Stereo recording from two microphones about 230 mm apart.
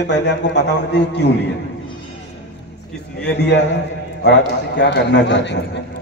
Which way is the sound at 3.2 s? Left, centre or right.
Left.